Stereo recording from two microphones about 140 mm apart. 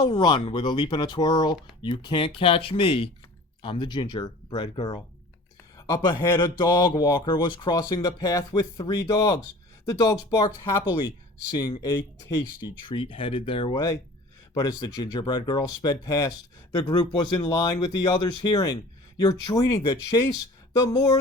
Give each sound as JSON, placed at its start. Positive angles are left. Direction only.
{"t": 0.0, "sound": "speech", "side_deg": 35}
{"t": 5.9, "sound": "speech", "side_deg": 20}
{"t": 6.6, "sound": "speech", "side_deg": 30}
{"t": 10.8, "sound": "speech", "side_deg": 30}